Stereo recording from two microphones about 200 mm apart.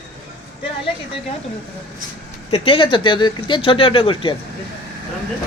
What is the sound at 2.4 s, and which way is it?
Speech, 25° left (ahead or behind).